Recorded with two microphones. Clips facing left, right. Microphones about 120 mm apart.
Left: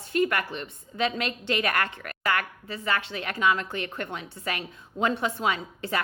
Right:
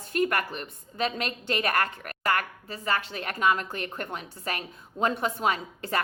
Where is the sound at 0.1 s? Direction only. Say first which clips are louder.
Left 1 dB; 45° right (ahead or behind).